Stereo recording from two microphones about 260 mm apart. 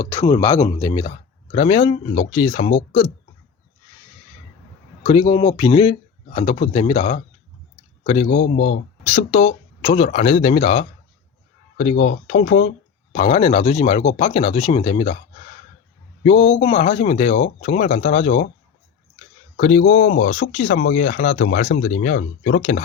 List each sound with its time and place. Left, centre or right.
0.0 s speech: centre
5.3 s speech: centre
8.4 s speech: left
8.7 s speech: left
11.9 s speech: left
16.2 s speech: left
19.5 s speech: left
21.7 s speech: left
22.0 s speech: left